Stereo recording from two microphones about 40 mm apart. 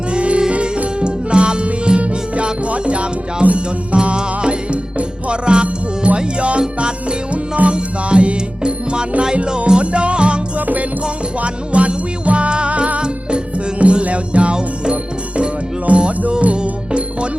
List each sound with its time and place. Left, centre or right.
0.1 s music: right